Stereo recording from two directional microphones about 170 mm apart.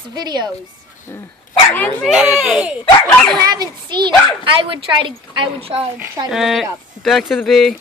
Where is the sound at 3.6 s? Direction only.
25° right (ahead or behind).